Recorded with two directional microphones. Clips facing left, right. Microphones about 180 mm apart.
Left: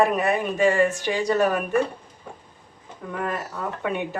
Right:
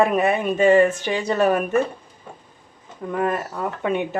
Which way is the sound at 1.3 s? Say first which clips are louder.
Right 3 dB; 25° right (ahead or behind).